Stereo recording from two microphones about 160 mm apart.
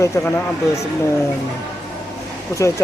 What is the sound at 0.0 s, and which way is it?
Speech, 20° left (ahead or behind).